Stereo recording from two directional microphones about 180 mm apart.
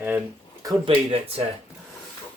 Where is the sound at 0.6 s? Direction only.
30° right (ahead or behind).